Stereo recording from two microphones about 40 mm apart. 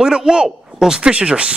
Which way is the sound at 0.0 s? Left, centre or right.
Right.